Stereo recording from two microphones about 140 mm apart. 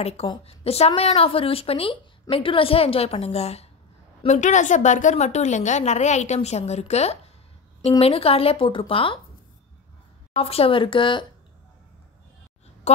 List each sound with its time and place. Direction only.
0.4 s a woman's voice: 45° left (ahead or behind)
4.3 s a woman's voice: 60° left (ahead or behind); by 9.2 s 40° left (ahead or behind)
10.3 s speech: 45° left (ahead or behind)
12.9 s a sound: 55° left (ahead or behind)